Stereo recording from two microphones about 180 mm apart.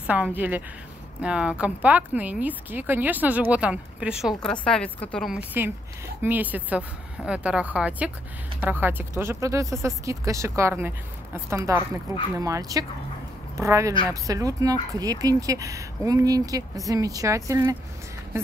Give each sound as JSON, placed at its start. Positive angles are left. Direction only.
{"t": 0.0, "sound": "speech", "side_deg": -10}